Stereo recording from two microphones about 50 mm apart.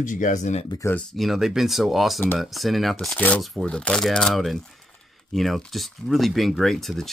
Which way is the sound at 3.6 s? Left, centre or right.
Centre.